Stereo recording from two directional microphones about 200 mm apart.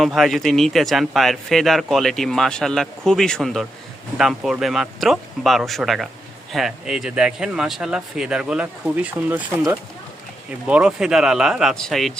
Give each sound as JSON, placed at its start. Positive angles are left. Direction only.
{"t": 0.0, "sound": "speech", "side_deg": 0}
{"t": 10.7, "sound": "speech", "side_deg": -5}